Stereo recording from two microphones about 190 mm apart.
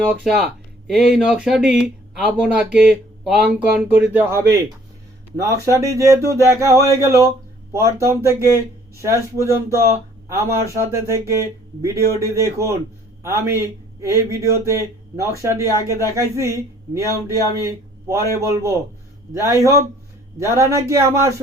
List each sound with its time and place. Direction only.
0.1 s speech: centre (ahead or behind)